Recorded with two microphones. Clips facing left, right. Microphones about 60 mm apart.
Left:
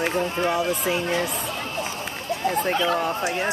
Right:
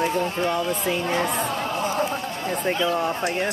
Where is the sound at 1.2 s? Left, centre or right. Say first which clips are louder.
Right 4 dB; right.